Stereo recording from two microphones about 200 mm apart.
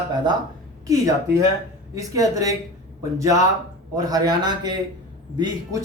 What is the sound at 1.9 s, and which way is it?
Speech, 15° right (ahead or behind).